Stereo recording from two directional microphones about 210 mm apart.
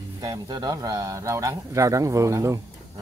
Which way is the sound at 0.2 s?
20° right (ahead or behind).